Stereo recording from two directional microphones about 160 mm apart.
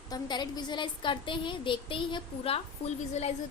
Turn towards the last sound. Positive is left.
turn(degrees=40)  # may be behind; listen again after turning